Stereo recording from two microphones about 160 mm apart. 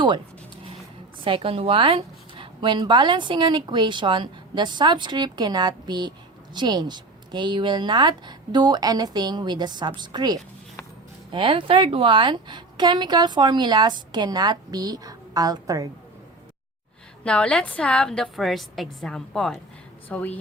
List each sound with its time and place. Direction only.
1.2 s speech: 35° right (ahead or behind)
17.2 s a woman's voice: 5° left (ahead or behind)